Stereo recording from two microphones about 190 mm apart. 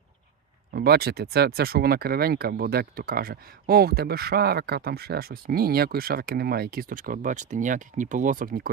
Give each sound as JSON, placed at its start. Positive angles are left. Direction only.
{"t": 0.7, "sound": "speech", "side_deg": -55}